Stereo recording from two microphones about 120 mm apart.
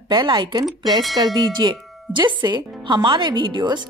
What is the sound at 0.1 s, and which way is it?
A woman's voice, 40° right (ahead or behind).